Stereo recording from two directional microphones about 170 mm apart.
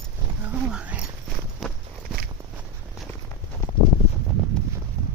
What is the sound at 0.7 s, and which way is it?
Speech, 5° right (ahead or behind).